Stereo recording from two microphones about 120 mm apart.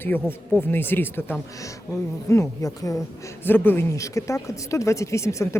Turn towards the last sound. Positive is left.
turn(degrees=25)  # may be behind; listen again after turning